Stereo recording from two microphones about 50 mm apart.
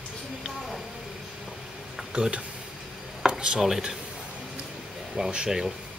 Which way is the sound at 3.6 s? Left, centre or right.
Centre.